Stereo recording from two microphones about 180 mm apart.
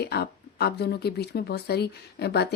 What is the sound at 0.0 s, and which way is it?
Speech, 65° left (ahead or behind).